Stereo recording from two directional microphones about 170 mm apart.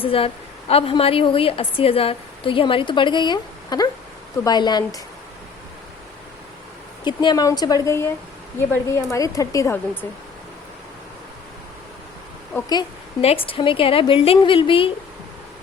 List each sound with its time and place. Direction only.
0.0 s a woman's voice: 35° left (ahead or behind)
7.0 s speech: 25° left (ahead or behind)
12.5 s speech: 15° left (ahead or behind)
13.2 s a woman's voice: 35° left (ahead or behind)